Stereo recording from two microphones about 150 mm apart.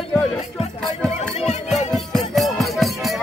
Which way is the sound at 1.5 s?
50° left (ahead or behind).